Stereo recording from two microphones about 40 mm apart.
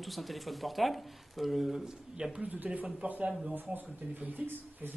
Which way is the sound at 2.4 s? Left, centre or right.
Right.